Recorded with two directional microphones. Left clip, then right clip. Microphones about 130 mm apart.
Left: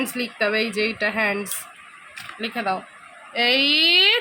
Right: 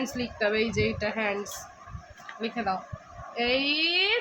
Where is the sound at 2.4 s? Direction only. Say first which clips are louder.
Left 5 dB; 60° left (ahead or behind).